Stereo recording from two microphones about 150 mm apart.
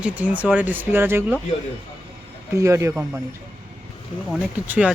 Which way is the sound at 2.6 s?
20° right (ahead or behind).